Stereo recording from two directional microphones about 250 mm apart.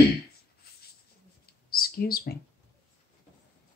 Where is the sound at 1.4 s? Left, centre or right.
Left.